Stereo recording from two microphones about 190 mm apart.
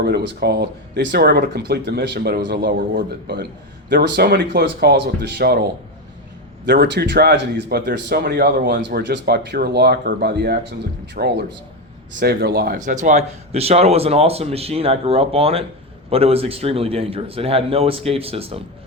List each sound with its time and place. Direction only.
0.0 s speech: 60° right (ahead or behind)
3.8 s speech: 65° right (ahead or behind)
6.7 s speech: 60° right (ahead or behind); by 18.6 s 30° right (ahead or behind)